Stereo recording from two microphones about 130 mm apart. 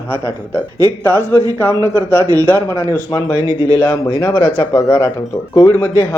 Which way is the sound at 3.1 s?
35° left (ahead or behind).